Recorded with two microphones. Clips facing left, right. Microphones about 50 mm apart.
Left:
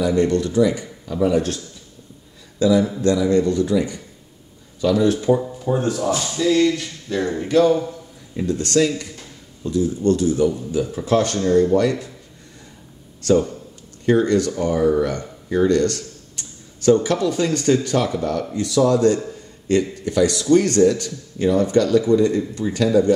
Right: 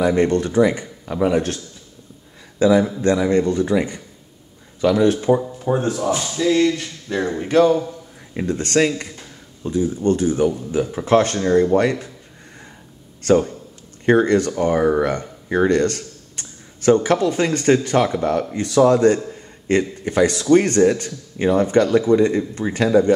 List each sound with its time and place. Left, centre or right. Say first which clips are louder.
0.0 s a man's voice: right 1 dB; right
2.6 s a man's voice: right 1 dB; right
5.8 s speech: left 1 dB; centre
8.4 s a man's voice: even; right
9.6 s a man's voice: even; right
13.2 s a man's voice: right 1 dB; right